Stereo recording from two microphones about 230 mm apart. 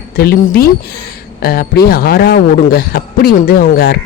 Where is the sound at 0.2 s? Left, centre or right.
Left.